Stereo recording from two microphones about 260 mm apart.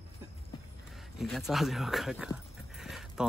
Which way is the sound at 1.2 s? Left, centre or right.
Centre.